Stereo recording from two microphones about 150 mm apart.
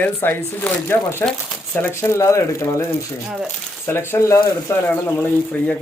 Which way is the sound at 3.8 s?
15° left (ahead or behind).